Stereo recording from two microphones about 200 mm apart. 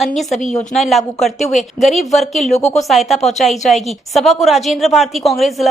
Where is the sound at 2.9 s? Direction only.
Centre (ahead or behind).